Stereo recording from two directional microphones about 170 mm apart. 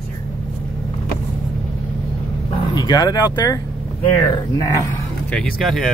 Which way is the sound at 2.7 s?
25° left (ahead or behind).